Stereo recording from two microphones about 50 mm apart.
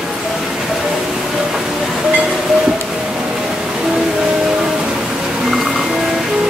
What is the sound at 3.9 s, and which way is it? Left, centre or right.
Music, centre.